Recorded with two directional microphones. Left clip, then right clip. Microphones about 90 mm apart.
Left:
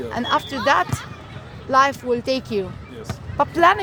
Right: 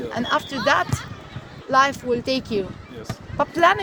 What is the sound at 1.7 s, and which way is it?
Speech, 35° left (ahead or behind).